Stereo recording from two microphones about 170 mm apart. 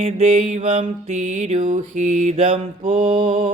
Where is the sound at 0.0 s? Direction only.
35° right (ahead or behind).